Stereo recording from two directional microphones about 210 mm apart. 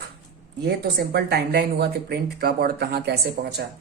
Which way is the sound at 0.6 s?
50° right (ahead or behind).